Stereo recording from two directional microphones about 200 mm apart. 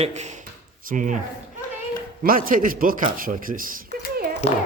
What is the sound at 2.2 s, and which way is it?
Speech, 45° right (ahead or behind).